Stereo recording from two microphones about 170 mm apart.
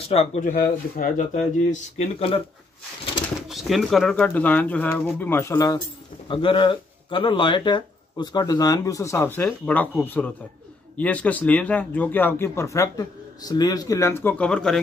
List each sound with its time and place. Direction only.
0.1 s speech: 40° left (ahead or behind)
3.4 s speech: centre (ahead or behind); by 5.8 s 20° left (ahead or behind)
6.2 s speech: 30° left (ahead or behind); by 14.8 s 5° left (ahead or behind)